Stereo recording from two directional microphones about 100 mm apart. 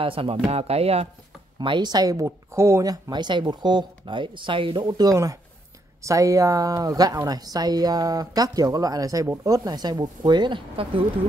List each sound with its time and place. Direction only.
0.0 s speech: 65° right (ahead or behind)
0.5 s speech: 90° right
1.6 s speech: 50° right (ahead or behind)
4.8 s a woman's voice: 40° right (ahead or behind); by 11.1 s 60° right (ahead or behind)